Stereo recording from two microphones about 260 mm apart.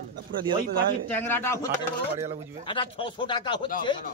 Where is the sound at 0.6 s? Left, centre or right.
Right.